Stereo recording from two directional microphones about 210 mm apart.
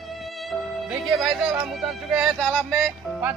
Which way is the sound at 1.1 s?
Centre (ahead or behind).